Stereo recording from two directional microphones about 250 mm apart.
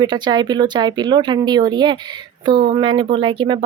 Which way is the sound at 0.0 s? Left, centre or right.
Centre.